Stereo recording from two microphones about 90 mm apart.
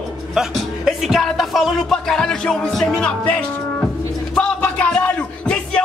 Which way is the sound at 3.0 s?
15° left (ahead or behind).